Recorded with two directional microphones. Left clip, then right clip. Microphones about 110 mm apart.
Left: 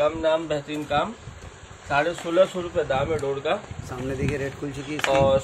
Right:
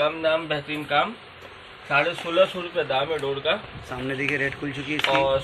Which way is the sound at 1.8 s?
20° left (ahead or behind).